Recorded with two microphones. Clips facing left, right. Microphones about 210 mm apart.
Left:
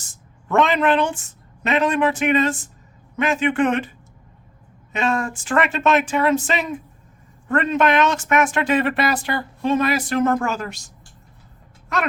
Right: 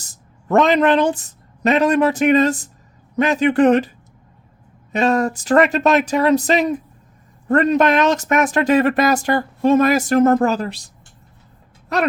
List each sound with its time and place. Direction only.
0.0 s speech: 40° right (ahead or behind)
4.9 s speech: 40° right (ahead or behind)